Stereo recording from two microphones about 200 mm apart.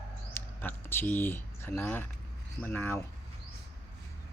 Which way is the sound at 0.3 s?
10° left (ahead or behind).